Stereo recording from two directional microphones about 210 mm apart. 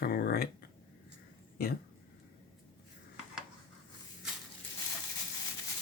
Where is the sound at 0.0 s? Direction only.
45° left (ahead or behind).